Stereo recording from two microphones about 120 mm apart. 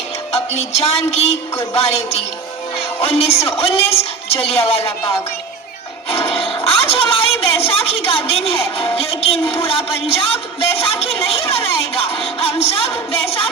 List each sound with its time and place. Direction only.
0.3 s music: 60° left (ahead or behind)
1.7 s speech: 60° left (ahead or behind)
4.8 s speech: 20° left (ahead or behind)
6.1 s music: 55° left (ahead or behind)
6.7 s a woman's voice: 55° left (ahead or behind)